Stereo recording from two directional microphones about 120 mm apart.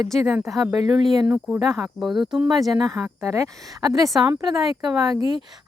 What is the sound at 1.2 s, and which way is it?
Speech, 15° right (ahead or behind).